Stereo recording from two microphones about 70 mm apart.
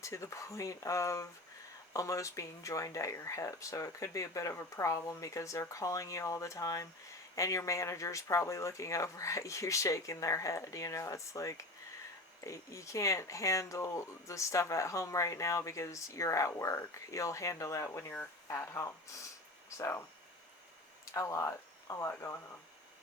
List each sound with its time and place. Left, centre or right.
0.0 s speech: left
21.0 s speech: left